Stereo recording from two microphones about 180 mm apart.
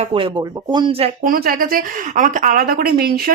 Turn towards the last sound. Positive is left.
turn(degrees=-60)  # may be behind; listen again after turning